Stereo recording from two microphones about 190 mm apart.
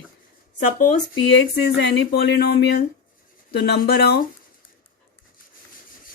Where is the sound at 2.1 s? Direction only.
60° left (ahead or behind).